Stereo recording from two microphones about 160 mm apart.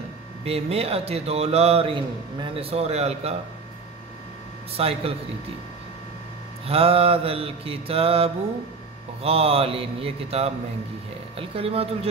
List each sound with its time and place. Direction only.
0.5 s a man's voice: 40° right (ahead or behind)
4.7 s a man's voice: 40° right (ahead or behind)
6.7 s a man's voice: 35° right (ahead or behind)